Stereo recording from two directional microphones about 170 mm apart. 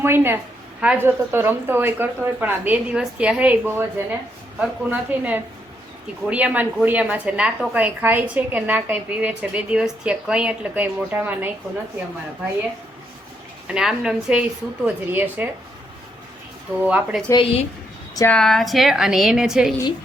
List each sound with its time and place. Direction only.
0.0 s a woman's voice: 15° right (ahead or behind)
13.7 s a woman's voice: 5° right (ahead or behind)
16.8 s a woman's voice: 5° right (ahead or behind)
17.2 s a woman's voice: 30° left (ahead or behind)
18.3 s a woman's voice: 5° left (ahead or behind)